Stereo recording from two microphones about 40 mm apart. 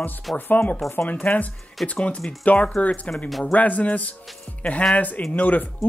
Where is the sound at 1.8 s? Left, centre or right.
Centre.